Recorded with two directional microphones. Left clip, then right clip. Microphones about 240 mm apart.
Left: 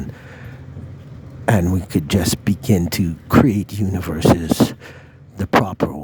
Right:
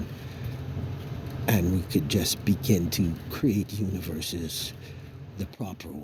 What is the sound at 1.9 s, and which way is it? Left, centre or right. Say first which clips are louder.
Speech: left 6 dB; left.